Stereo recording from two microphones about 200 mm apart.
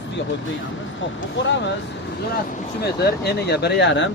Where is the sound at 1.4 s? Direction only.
65° left (ahead or behind).